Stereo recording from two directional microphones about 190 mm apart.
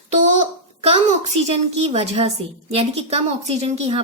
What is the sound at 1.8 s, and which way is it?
A woman's voice, 35° right (ahead or behind).